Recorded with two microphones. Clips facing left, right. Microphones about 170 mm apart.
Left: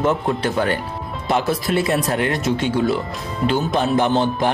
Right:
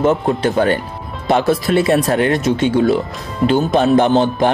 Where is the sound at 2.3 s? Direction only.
20° right (ahead or behind).